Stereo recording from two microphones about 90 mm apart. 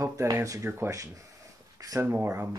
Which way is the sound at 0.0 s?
40° right (ahead or behind).